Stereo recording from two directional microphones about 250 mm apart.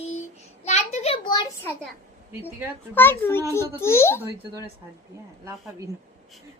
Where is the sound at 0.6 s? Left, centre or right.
Left.